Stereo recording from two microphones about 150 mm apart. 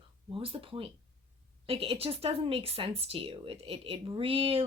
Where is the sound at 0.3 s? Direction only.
35° right (ahead or behind).